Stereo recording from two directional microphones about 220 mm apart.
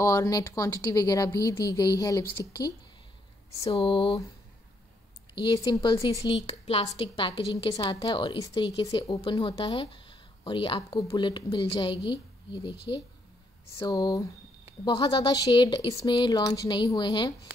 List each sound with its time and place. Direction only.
0.0 s speech: 15° left (ahead or behind)
3.6 s speech: 25° left (ahead or behind)
5.3 s a woman's voice: 20° left (ahead or behind)
13.7 s speech: 15° left (ahead or behind)